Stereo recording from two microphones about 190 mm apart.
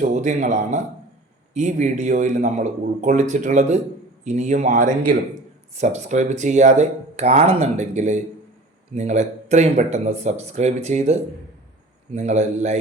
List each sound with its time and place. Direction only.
0.0 s speech: 40° right (ahead or behind)